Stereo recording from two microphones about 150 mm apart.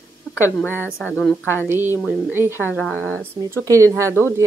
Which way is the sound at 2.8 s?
5° left (ahead or behind).